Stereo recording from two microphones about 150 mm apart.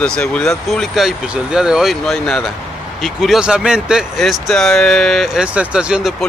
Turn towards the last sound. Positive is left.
turn(degrees=-5)  # may be behind; listen again after turning